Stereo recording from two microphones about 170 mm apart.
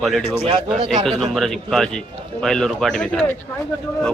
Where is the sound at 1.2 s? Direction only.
Centre (ahead or behind).